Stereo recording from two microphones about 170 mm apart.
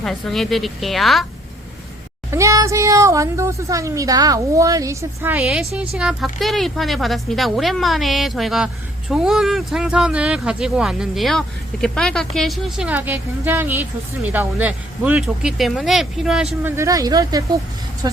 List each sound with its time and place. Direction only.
0.0 s speech: centre (ahead or behind)
2.3 s speech: 20° right (ahead or behind); by 16.5 s centre (ahead or behind)
16.6 s speech: 15° right (ahead or behind)